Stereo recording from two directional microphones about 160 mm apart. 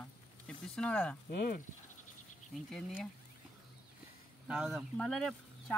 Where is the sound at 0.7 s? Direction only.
10° left (ahead or behind).